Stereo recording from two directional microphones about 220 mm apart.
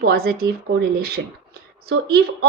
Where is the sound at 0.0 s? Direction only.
45° right (ahead or behind).